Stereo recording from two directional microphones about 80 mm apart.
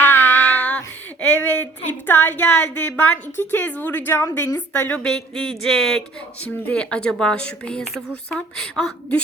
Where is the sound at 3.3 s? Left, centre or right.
Left.